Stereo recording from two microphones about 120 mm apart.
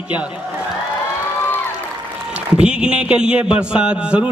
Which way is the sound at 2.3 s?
10° right (ahead or behind).